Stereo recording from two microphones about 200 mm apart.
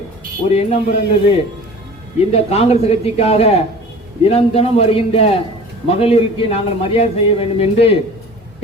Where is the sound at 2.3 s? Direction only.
30° left (ahead or behind).